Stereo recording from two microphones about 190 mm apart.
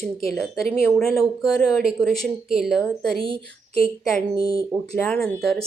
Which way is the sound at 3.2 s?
30° right (ahead or behind).